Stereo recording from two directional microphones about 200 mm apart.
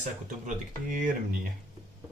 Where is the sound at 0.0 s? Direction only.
40° right (ahead or behind).